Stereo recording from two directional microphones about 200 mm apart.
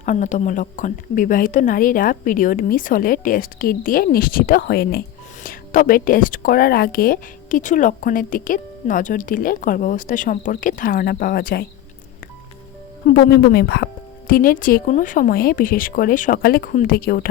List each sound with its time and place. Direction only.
0.0 s a woman's voice: 40° left (ahead or behind)
13.1 s a woman's voice: 50° left (ahead or behind)